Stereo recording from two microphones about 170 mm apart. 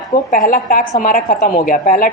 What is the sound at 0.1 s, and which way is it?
A woman's voice, 50° left (ahead or behind).